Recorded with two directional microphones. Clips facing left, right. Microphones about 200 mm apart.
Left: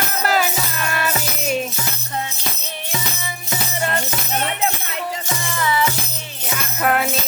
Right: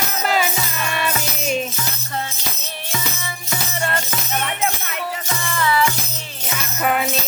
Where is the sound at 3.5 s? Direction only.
20° left (ahead or behind).